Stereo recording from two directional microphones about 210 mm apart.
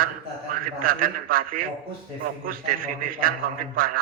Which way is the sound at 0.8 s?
45° right (ahead or behind).